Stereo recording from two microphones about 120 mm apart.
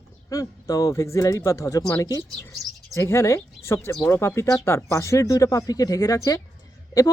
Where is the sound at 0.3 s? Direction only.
30° left (ahead or behind).